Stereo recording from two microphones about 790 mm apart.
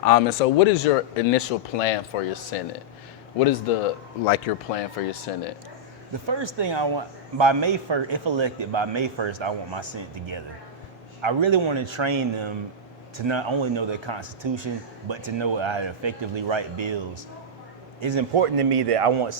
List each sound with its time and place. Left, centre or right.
0.0 s speech: left
4.3 s speech: left
6.2 s a man's voice: right